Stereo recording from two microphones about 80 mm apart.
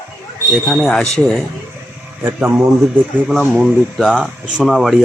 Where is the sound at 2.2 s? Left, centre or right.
Right.